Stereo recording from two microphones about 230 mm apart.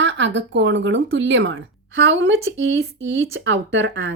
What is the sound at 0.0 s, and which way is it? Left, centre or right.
Speech, right.